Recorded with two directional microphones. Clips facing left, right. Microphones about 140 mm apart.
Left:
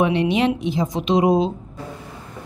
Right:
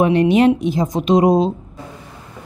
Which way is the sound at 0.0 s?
45° right (ahead or behind).